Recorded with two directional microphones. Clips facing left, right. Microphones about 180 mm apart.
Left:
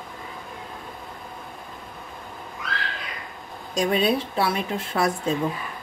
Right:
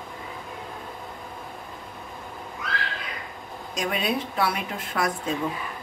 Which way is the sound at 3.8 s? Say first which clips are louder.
Left 5 dB; 30° left (ahead or behind).